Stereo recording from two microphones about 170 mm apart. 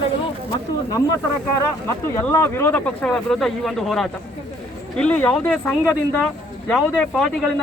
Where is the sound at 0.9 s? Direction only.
20° left (ahead or behind).